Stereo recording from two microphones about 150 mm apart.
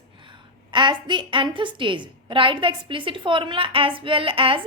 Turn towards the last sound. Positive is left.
turn(degrees=-35)  # may be behind; listen again after turning